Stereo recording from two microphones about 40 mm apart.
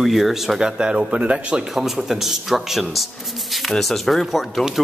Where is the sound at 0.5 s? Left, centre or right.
Right.